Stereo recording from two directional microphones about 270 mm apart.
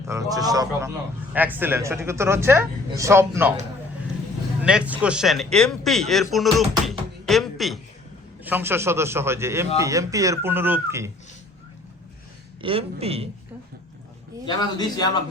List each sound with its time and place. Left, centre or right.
0.1 s speech: centre
4.6 s a man's voice: centre
12.6 s speech: right
14.4 s a man's voice: centre